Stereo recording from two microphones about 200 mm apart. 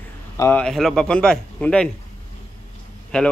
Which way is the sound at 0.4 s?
10° left (ahead or behind).